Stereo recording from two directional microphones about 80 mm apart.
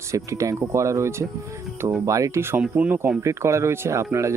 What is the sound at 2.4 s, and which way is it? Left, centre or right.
Speech, right.